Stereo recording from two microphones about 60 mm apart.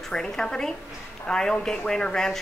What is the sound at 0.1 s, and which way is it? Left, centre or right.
A woman's voice, centre.